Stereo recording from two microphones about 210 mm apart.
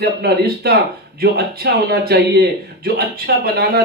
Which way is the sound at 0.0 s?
50° right (ahead or behind).